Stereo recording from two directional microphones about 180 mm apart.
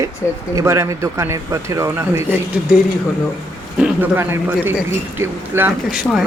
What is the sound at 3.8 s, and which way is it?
Speech, 10° right (ahead or behind).